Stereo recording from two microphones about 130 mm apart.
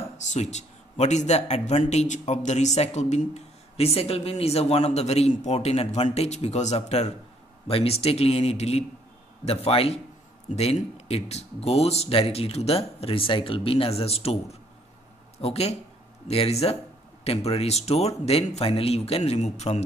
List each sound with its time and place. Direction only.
0.3 s a man's voice: 60° left (ahead or behind)